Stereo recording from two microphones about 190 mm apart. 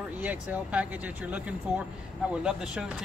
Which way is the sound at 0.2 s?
10° right (ahead or behind).